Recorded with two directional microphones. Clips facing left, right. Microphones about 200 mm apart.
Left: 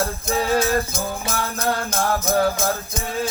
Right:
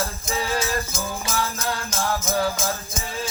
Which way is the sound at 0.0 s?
60° left (ahead or behind).